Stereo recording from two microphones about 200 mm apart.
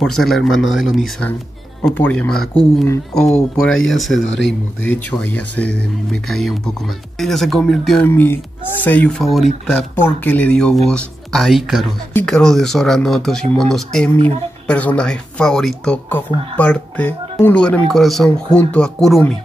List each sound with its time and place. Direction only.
0.0 s speech: centre (ahead or behind)
3.8 s speech: centre (ahead or behind)
4.2 s speech: 65° left (ahead or behind)
4.8 s speech: 10° left (ahead or behind)